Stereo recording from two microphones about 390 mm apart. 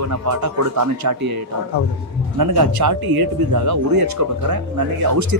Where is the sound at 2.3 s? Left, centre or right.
Right.